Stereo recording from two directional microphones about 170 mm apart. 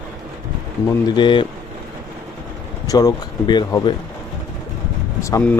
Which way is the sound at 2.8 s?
20° left (ahead or behind).